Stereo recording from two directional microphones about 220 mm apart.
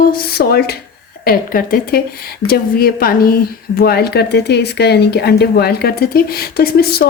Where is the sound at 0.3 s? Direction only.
45° left (ahead or behind).